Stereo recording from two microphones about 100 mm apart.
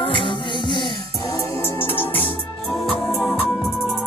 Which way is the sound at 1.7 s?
20° left (ahead or behind).